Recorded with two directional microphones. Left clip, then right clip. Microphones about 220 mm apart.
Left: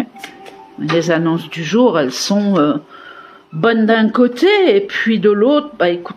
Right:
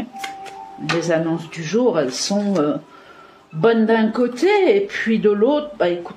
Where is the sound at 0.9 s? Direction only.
40° left (ahead or behind).